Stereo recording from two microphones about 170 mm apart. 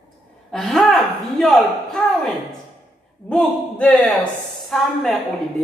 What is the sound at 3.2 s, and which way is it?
A man's voice, 5° left (ahead or behind).